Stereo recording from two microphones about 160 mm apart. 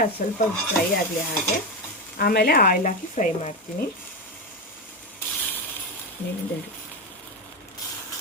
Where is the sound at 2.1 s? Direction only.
75° left (ahead or behind); by 3.5 s 55° left (ahead or behind).